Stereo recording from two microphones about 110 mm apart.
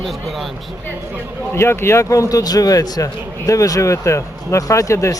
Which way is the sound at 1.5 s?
25° left (ahead or behind).